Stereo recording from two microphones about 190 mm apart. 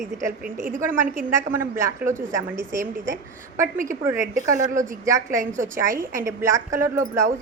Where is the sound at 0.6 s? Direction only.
45° right (ahead or behind).